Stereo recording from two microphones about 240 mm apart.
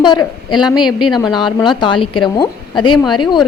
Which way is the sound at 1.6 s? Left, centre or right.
Centre.